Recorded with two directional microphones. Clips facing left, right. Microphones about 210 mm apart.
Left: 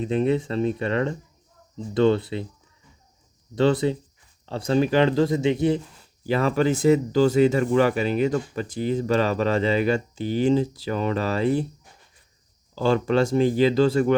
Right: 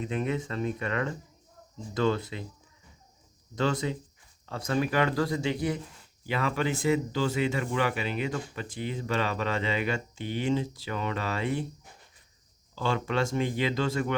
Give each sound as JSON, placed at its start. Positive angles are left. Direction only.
{"t": 0.0, "sound": "speech", "side_deg": 30}
{"t": 3.5, "sound": "speech", "side_deg": 30}
{"t": 6.2, "sound": "speech", "side_deg": 40}
{"t": 12.7, "sound": "speech", "side_deg": 40}